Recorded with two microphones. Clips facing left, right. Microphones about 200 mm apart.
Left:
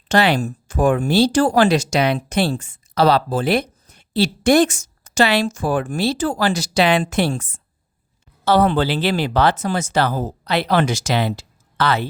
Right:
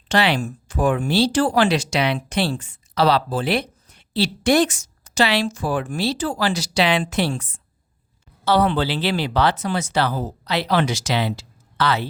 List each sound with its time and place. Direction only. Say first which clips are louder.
0.1 s speech: left 3 dB; 45° left (ahead or behind)